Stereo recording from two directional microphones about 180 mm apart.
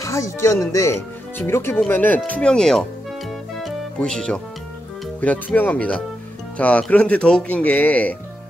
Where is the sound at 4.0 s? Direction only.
5° left (ahead or behind).